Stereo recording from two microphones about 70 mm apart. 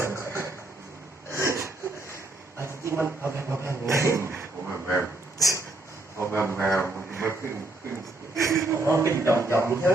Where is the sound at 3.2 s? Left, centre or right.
Right.